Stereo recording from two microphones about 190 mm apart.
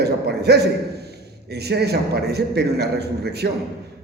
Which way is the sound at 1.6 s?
60° right (ahead or behind).